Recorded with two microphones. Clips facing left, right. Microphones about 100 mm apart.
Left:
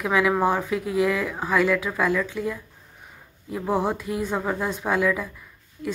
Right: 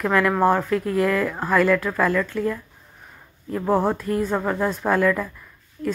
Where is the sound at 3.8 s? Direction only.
5° left (ahead or behind).